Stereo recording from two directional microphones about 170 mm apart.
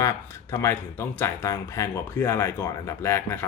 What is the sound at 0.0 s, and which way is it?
Speech, 15° left (ahead or behind).